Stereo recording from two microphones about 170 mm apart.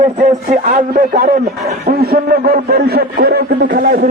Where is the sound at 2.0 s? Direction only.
65° right (ahead or behind).